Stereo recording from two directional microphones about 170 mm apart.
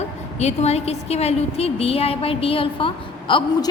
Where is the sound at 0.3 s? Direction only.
40° left (ahead or behind).